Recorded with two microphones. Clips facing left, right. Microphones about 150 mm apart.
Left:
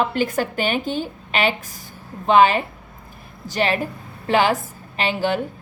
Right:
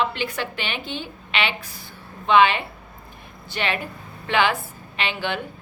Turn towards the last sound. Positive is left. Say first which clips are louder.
# left 5 dB
turn(degrees=40)  # may be behind; listen again after turning